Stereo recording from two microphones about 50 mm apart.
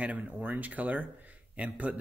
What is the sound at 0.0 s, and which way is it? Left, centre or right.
Speech, right.